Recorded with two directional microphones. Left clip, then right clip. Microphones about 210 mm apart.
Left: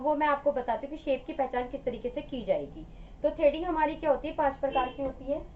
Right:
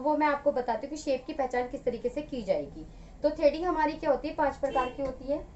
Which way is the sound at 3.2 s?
15° right (ahead or behind).